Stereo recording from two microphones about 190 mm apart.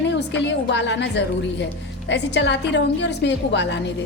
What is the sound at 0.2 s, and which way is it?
A woman's voice, 70° left (ahead or behind).